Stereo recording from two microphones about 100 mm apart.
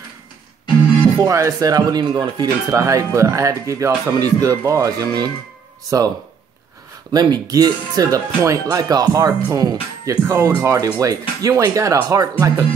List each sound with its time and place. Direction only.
1.2 s speech: 30° right (ahead or behind)
2.7 s speech: 35° right (ahead or behind)